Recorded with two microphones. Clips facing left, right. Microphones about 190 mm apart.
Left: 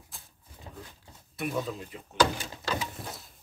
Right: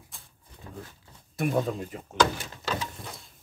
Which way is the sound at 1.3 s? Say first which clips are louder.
Right 5 dB; 45° right (ahead or behind).